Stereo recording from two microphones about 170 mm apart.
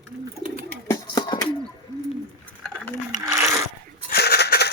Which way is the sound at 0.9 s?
25° left (ahead or behind).